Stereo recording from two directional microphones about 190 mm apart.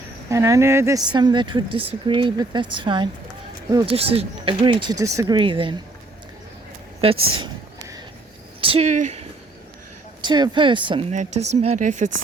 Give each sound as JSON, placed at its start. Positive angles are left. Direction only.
{"t": 0.3, "sound": "speech", "side_deg": -15}
{"t": 7.0, "sound": "speech", "side_deg": -30}
{"t": 7.3, "sound": "a sound", "side_deg": -20}
{"t": 8.6, "sound": "speech", "side_deg": -30}
{"t": 10.2, "sound": "speech", "side_deg": -25}
{"t": 11.1, "sound": "speech", "side_deg": -40}